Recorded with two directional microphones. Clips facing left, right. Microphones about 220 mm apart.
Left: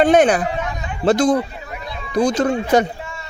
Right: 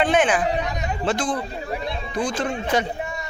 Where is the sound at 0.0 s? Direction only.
40° left (ahead or behind).